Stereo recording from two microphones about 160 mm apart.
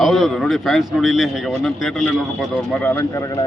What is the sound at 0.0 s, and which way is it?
Speech, centre (ahead or behind).